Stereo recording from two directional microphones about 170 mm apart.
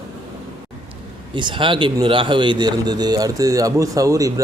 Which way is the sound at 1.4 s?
30° right (ahead or behind).